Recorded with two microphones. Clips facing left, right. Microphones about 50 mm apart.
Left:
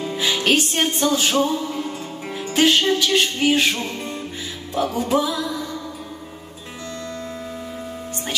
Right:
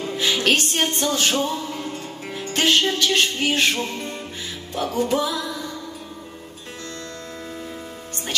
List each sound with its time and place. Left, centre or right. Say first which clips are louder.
0.0 s music: even; centre